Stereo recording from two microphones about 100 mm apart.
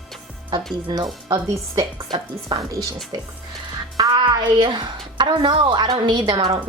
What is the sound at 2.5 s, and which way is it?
Speech, 55° right (ahead or behind).